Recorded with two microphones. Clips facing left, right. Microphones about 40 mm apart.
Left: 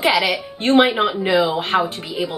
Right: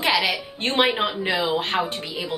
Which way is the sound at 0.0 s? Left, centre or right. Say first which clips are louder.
Left 4 dB; centre.